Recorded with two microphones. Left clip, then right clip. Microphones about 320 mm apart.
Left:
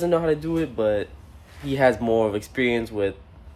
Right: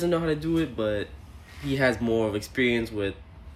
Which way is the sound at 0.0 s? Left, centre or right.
Centre.